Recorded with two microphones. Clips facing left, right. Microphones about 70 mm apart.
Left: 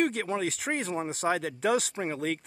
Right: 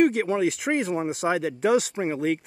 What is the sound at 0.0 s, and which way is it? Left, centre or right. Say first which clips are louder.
Speech: right 7 dB; centre.